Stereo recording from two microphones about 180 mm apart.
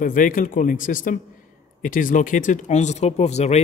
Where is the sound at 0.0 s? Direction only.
50° left (ahead or behind).